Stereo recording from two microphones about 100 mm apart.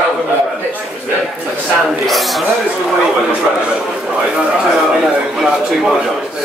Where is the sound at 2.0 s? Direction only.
Centre (ahead or behind).